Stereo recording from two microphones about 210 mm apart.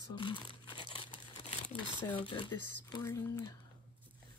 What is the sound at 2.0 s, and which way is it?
Speech, 25° left (ahead or behind).